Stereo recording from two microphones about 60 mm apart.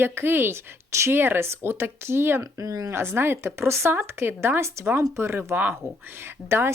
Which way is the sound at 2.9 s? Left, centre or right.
Right.